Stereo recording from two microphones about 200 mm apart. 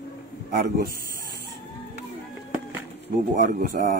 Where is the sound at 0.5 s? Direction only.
50° right (ahead or behind).